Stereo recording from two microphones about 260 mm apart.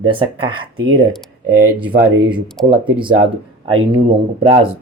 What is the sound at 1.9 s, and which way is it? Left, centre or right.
Speech, centre.